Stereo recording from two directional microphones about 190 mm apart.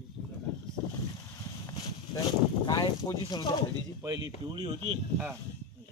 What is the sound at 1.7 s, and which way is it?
Speech, 20° left (ahead or behind).